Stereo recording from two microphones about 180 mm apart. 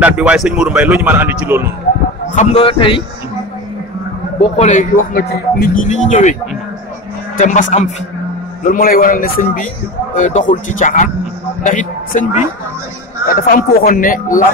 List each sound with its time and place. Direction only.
0.0 s speech: 5° right (ahead or behind)
2.3 s a man's voice: 30° left (ahead or behind)
4.4 s speech: 40° left (ahead or behind)
7.3 s a man's voice: 45° left (ahead or behind)